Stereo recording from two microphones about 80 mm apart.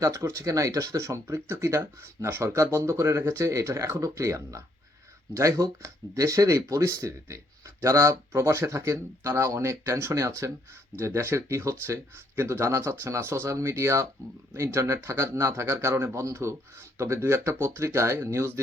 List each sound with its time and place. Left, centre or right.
0.0 s speech: right